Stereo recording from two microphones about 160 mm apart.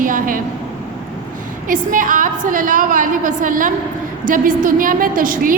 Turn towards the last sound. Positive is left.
turn(degrees=-60)  # may be behind; listen again after turning